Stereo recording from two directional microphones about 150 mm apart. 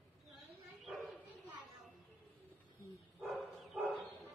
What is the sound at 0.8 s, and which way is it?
Bow-wow, centre (ahead or behind).